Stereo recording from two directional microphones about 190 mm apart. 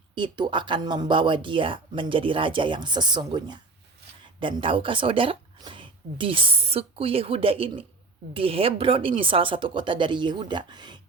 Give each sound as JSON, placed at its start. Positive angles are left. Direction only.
{"t": 0.1, "sound": "speech", "side_deg": -25}